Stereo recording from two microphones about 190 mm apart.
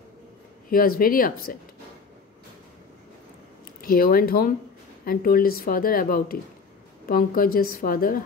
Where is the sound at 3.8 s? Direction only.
50° left (ahead or behind).